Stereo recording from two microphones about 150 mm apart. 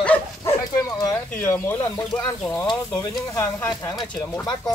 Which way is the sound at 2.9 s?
25° left (ahead or behind).